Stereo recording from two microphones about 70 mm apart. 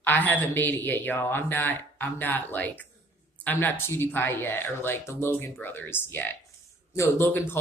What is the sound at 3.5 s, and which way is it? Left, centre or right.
Speech, left.